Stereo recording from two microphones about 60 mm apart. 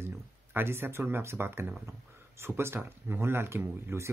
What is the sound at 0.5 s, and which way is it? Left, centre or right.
Speech, right.